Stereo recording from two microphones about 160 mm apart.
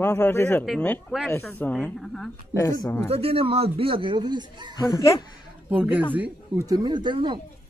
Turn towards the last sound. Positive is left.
turn(degrees=-30)  # may be behind; listen again after turning